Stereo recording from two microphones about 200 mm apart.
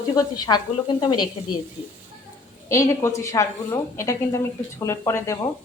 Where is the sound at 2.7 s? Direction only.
15° left (ahead or behind).